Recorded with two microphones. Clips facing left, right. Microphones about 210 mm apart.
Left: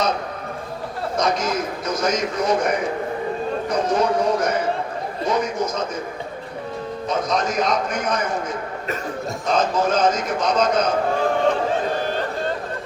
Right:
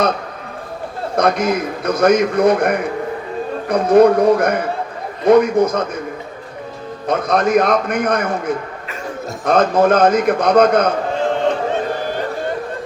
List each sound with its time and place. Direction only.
1.1 s a man's voice: 60° right (ahead or behind)
7.1 s a man's voice: 60° right (ahead or behind)